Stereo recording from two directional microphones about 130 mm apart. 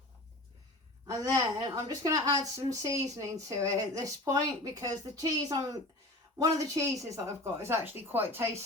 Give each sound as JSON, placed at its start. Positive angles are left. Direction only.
{"t": 1.0, "sound": "speech", "side_deg": -25}